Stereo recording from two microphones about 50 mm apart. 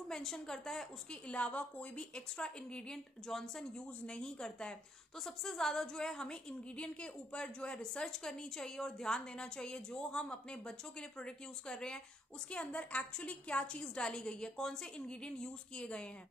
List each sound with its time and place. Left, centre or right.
0.1 s a woman's voice: centre
1.2 s a woman's voice: left
5.2 s a woman's voice: centre